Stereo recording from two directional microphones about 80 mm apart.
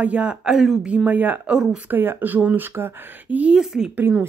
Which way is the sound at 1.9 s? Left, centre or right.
Right.